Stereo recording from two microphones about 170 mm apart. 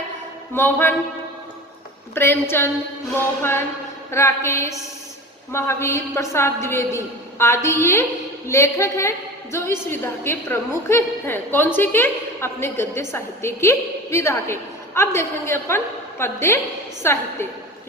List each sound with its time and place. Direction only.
0.5 s a woman's voice: 15° left (ahead or behind)
2.1 s a woman's voice: 15° left (ahead or behind)